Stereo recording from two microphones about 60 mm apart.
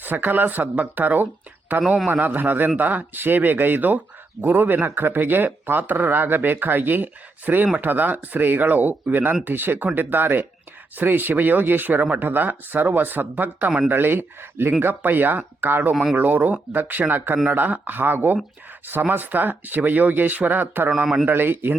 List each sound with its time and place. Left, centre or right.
0.0 s a man's voice: right
13.7 s speech: centre
13.9 s a man's voice: right
20.9 s a man's voice: centre
21.2 s a man's voice: right